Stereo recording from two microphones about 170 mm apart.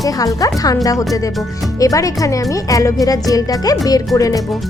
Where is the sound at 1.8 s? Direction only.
20° left (ahead or behind).